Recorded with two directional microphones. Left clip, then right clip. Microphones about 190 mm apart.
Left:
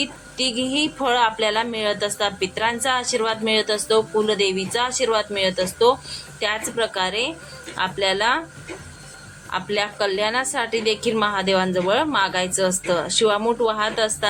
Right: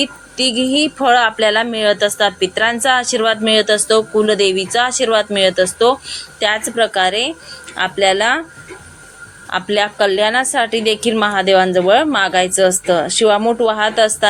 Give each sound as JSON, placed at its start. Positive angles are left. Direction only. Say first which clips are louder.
{"t": 0.0, "sound": "speech", "louder": "right 7 dB", "side_deg": -15}
{"t": 9.5, "sound": "speech", "louder": "right 7 dB", "side_deg": -15}